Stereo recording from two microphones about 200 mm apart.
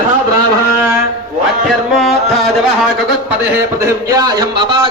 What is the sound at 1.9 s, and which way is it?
Speech, centre (ahead or behind).